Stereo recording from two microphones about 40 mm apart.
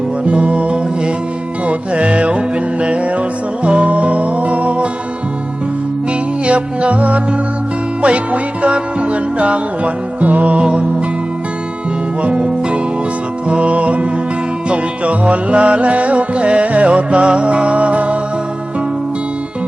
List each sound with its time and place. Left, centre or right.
0.3 s music: right
6.4 s music: right
12.2 s music: right